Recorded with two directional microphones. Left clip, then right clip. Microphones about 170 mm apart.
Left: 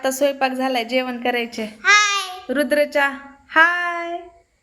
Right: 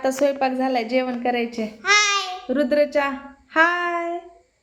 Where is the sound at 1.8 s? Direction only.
20° right (ahead or behind).